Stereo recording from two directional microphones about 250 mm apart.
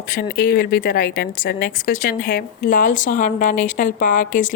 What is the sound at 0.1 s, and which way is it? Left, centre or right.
A woman's voice, left.